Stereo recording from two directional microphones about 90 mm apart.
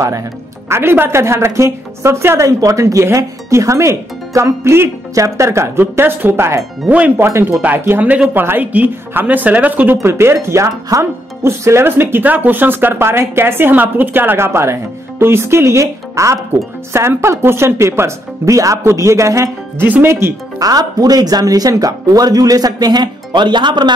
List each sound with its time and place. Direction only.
0.7 s a woman's voice: 25° right (ahead or behind)
6.9 s speech: 15° right (ahead or behind)
7.2 s speech: 30° right (ahead or behind)
9.9 s a woman's voice: 30° right (ahead or behind)
20.5 s speech: 45° right (ahead or behind)